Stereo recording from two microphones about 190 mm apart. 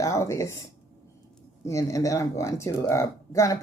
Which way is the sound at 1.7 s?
15° left (ahead or behind).